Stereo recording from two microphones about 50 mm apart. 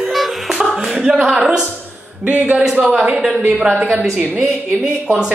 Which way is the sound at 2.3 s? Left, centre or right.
Right.